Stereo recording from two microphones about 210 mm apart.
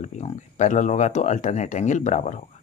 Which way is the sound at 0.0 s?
35° left (ahead or behind).